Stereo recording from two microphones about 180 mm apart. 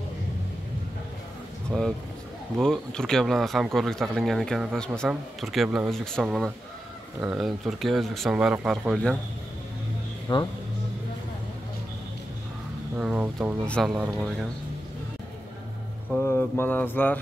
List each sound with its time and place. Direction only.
1.7 s speech: centre (ahead or behind)
10.2 s speech: 20° left (ahead or behind)
12.9 s speech: 5° right (ahead or behind)
13.7 s speech: centre (ahead or behind)
16.1 s mantra: 10° left (ahead or behind)